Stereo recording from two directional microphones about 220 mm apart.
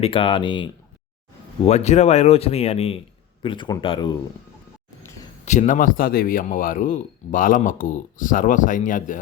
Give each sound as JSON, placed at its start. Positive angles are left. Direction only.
{"t": 0.0, "sound": "speech", "side_deg": 25}
{"t": 5.5, "sound": "speech", "side_deg": 35}